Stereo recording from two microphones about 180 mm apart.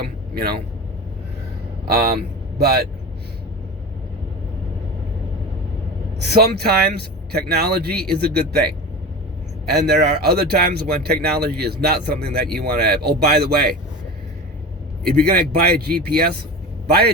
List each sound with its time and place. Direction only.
0.0 s vehicle: 60° right (ahead or behind)
1.8 s speech: 60° right (ahead or behind)
6.2 s speech: 65° right (ahead or behind)
9.6 s speech: 65° right (ahead or behind)
15.2 s speech: 60° right (ahead or behind)